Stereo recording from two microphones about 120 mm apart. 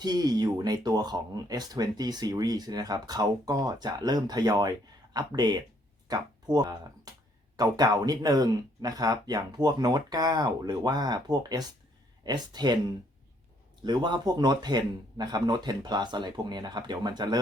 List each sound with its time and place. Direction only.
0.0 s speech: 35° right (ahead or behind)
13.8 s speech: 40° right (ahead or behind)